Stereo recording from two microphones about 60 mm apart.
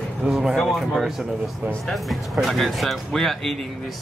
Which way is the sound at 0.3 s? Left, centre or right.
Centre.